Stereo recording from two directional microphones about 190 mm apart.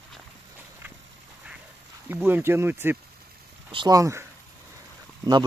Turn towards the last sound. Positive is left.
turn(degrees=-20)  # may be behind; listen again after turning